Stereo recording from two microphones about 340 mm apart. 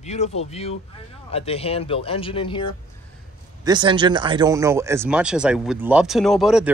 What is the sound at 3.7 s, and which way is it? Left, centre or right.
Speech, centre.